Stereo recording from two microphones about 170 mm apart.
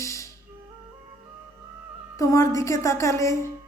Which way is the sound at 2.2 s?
15° left (ahead or behind).